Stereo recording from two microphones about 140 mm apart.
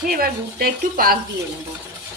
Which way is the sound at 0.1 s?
90° right.